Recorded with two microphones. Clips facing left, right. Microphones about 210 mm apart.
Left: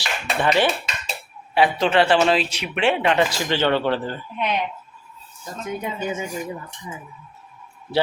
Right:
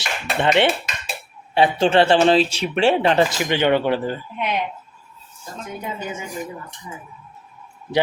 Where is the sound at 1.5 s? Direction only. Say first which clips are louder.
Right 2 dB; 30° right (ahead or behind).